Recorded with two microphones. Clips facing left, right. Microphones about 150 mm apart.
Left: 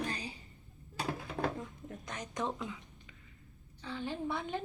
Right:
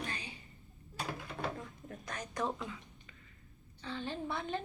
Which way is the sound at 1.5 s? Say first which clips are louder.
Left 2 dB; 20° left (ahead or behind).